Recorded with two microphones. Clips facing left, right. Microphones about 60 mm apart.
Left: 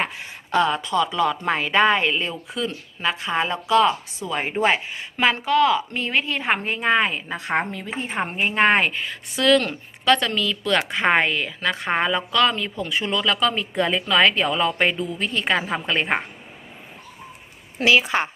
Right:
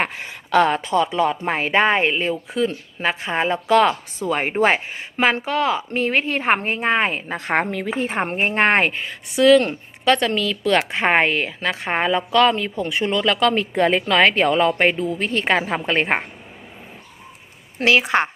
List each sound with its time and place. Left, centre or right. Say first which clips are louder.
0.0 s a sound: right 3 dB; right
0.7 s speech: right 2 dB; right
3.7 s a woman's voice: right 2 dB; right
6.7 s a woman's voice: even; right
7.7 s a woman's voice: right 6 dB; right
8.1 s a woman's voice: left 1 dB; right
9.3 s a woman's voice: right 5 dB; right
17.7 s a woman's voice: right 2 dB; right